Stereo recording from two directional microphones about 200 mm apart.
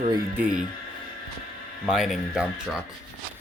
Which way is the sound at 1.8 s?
Centre (ahead or behind).